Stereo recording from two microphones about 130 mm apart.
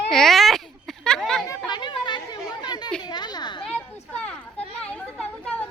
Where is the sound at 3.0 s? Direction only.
35° left (ahead or behind).